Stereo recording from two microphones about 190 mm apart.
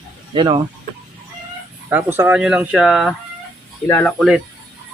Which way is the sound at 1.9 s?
10° right (ahead or behind).